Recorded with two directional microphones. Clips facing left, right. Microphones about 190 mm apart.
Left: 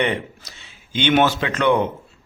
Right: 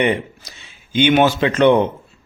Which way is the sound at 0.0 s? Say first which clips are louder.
Right 4 dB; 15° right (ahead or behind).